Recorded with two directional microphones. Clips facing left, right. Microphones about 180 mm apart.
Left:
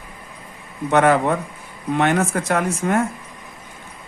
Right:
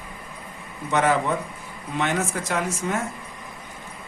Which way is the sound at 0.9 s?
60° left (ahead or behind).